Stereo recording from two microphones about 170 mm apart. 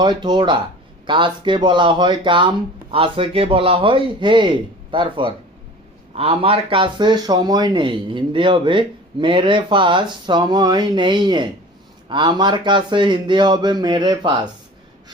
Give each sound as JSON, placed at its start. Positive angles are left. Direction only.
{"t": 0.0, "sound": "speech", "side_deg": -25}